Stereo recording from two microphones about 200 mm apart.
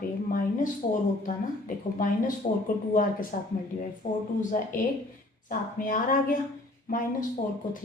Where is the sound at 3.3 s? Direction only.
45° left (ahead or behind).